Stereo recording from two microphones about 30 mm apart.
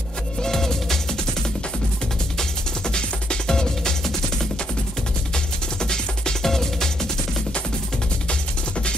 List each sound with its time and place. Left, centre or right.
0.4 s music: centre
2.3 s music: left
5.3 s music: left